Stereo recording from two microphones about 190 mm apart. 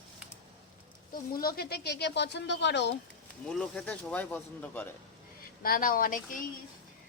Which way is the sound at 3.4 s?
5° left (ahead or behind).